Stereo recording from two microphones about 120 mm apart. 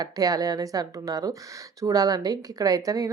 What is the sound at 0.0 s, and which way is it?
A woman's voice, 30° right (ahead or behind).